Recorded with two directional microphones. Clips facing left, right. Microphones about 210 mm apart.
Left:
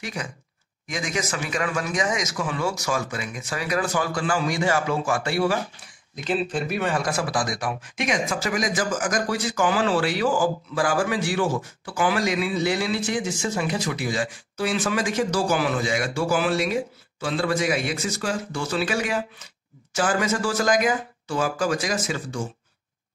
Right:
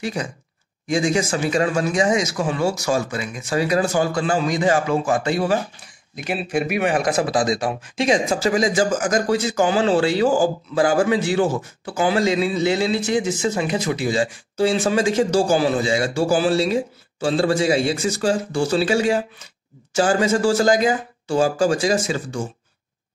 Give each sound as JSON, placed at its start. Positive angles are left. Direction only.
{"t": 0.0, "sound": "a man's voice", "side_deg": -30}